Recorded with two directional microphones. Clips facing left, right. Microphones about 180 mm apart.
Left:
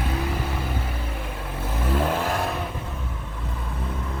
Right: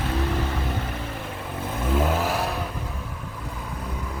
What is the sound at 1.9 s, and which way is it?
Vehicle, 5° right (ahead or behind).